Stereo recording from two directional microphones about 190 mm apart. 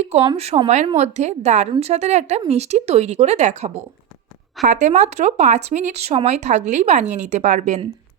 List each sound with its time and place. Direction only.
0.0 s speech: 35° right (ahead or behind)